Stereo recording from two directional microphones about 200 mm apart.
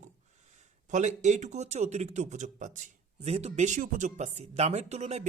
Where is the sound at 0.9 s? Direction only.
35° right (ahead or behind).